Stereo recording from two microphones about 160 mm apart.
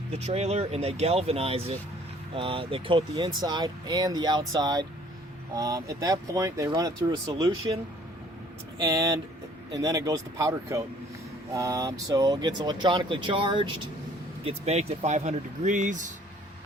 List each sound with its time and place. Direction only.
0.2 s speech: 40° right (ahead or behind); by 7.8 s 25° right (ahead or behind)
8.9 s speech: 25° right (ahead or behind)
14.4 s speech: 40° right (ahead or behind)